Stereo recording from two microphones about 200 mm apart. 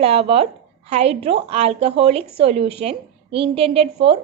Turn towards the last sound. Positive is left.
turn(degrees=-30)  # may be behind; listen again after turning